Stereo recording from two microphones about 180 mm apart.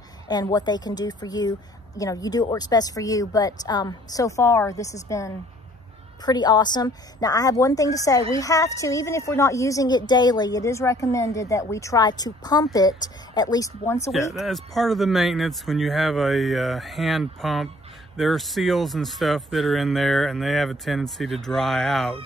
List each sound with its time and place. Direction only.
0.3 s a woman's voice: 20° left (ahead or behind)
14.4 s speech: centre (ahead or behind)